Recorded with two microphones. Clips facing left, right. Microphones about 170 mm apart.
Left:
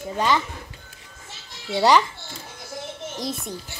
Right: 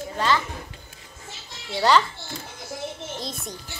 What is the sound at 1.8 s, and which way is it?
Speech, 15° left (ahead or behind).